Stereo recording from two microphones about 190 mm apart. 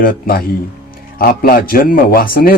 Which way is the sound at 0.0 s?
50° left (ahead or behind).